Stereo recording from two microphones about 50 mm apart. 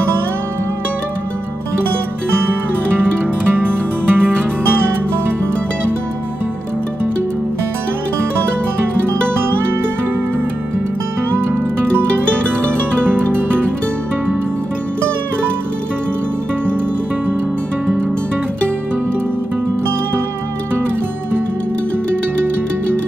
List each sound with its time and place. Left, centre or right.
3.5 s music: right
13.0 s music: right